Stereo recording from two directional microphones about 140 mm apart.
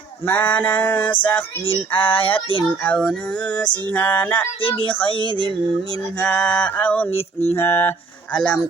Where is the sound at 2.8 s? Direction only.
10° left (ahead or behind).